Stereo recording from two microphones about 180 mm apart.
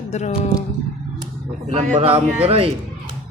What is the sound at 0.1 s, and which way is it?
Speech, 40° left (ahead or behind).